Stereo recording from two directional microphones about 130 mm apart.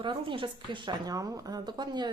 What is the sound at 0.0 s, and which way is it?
Speech, 40° right (ahead or behind).